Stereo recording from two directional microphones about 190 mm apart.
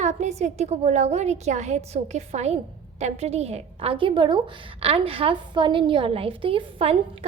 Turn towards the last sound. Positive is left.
turn(degrees=-30)  # may be behind; listen again after turning